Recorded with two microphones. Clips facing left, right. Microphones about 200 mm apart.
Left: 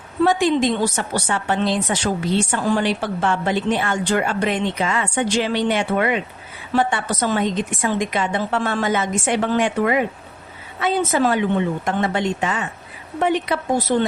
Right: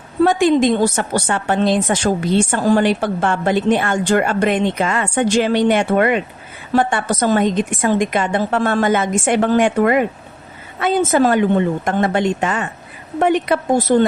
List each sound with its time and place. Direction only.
0.2 s a woman's voice: 50° right (ahead or behind)